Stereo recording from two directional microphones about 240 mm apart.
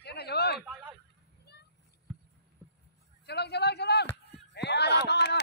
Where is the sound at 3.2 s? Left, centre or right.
Left.